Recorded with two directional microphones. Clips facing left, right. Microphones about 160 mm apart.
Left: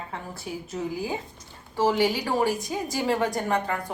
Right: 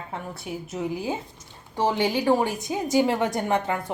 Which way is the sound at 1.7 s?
20° right (ahead or behind).